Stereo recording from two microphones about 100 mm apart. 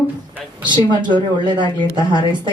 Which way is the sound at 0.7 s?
50° right (ahead or behind).